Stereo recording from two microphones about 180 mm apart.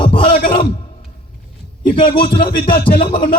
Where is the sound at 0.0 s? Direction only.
30° left (ahead or behind).